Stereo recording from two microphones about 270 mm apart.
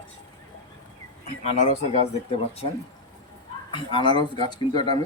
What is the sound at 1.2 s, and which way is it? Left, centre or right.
Speech, left.